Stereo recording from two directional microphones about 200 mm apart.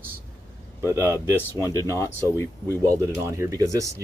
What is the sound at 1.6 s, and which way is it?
Speech, 15° right (ahead or behind).